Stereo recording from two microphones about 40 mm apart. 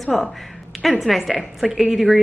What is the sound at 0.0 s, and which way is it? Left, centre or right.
Speech, centre.